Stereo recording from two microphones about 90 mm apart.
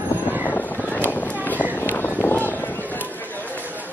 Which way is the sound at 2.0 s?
20° left (ahead or behind).